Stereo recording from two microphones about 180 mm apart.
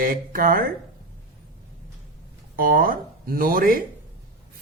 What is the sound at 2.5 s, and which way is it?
Speech, 55° right (ahead or behind).